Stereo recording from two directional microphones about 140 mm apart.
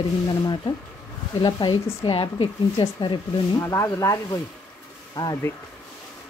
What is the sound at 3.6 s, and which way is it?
Speech, 20° left (ahead or behind).